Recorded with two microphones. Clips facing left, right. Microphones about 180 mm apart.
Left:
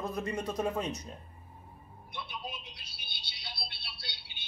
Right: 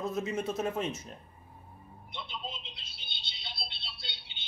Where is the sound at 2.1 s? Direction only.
25° right (ahead or behind).